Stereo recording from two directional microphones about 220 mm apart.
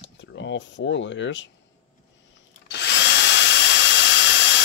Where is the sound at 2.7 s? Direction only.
50° left (ahead or behind).